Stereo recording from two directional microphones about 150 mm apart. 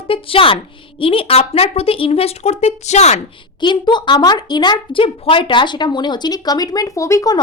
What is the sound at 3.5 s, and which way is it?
A child's voice, 30° left (ahead or behind).